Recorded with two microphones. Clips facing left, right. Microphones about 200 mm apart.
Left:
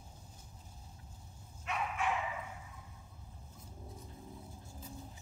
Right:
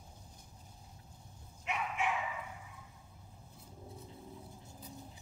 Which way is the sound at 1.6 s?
15° right (ahead or behind).